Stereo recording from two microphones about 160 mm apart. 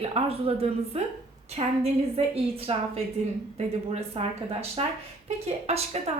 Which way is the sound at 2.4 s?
35° right (ahead or behind).